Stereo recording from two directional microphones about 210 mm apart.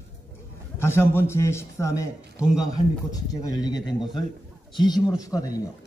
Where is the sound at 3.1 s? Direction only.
20° left (ahead or behind).